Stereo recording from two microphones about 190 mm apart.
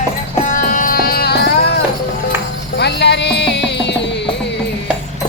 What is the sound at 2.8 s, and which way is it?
Music, 65° left (ahead or behind).